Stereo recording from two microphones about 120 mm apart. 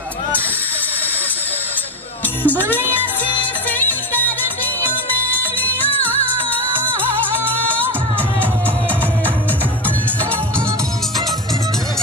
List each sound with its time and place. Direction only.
2.4 s speech: 15° left (ahead or behind)
3.3 s music: 15° left (ahead or behind)
5.4 s music: 15° left (ahead or behind)